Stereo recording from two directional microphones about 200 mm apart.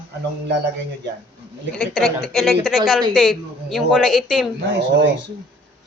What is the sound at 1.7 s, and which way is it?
A woman's voice, centre (ahead or behind).